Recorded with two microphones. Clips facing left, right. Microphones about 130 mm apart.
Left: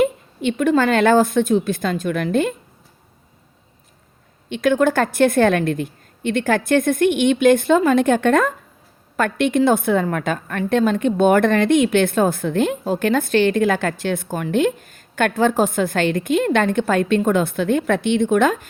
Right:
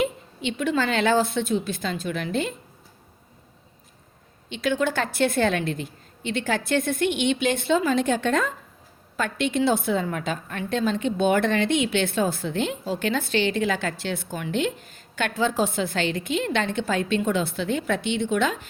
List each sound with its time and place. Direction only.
0.0 s a woman's voice: 45° left (ahead or behind)
4.4 s a woman's voice: 50° left (ahead or behind)